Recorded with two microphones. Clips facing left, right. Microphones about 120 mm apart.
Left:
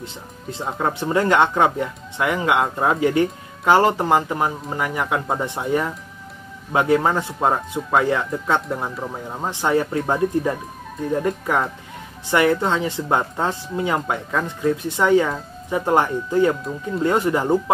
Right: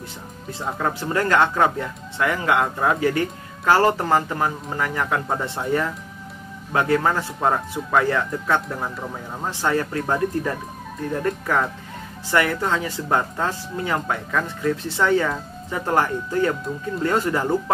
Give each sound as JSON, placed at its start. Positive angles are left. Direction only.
{"t": 0.0, "sound": "speech", "side_deg": 20}